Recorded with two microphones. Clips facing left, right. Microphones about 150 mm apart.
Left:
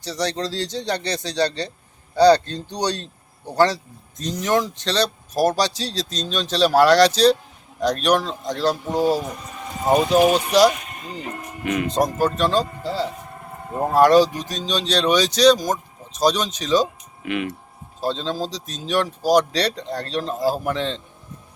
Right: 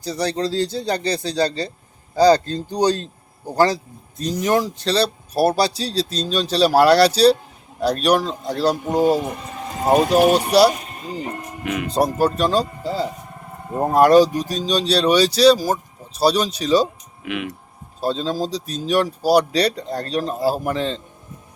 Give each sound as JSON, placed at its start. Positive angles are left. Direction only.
{"t": 0.0, "sound": "speech", "side_deg": -10}
{"t": 10.0, "sound": "speech", "side_deg": -50}
{"t": 11.6, "sound": "speech", "side_deg": 0}